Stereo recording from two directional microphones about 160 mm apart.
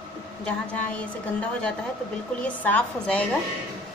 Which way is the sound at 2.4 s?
10° left (ahead or behind).